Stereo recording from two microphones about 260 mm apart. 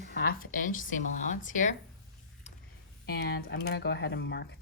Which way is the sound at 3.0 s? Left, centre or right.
Left.